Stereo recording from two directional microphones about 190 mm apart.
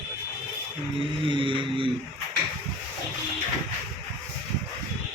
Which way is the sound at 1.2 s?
25° right (ahead or behind).